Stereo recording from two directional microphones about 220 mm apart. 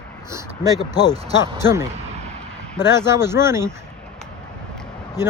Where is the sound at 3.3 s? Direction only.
10° right (ahead or behind).